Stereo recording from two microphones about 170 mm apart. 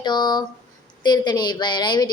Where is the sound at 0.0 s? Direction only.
25° left (ahead or behind).